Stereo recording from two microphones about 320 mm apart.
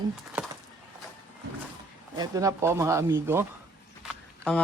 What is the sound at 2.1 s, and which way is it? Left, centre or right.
Speech, centre.